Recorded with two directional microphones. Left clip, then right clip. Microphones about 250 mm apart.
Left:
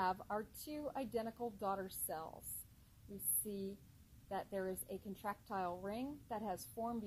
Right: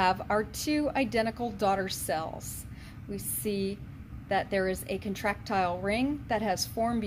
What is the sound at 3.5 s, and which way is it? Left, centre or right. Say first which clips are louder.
A woman's voice: right 17 dB; centre.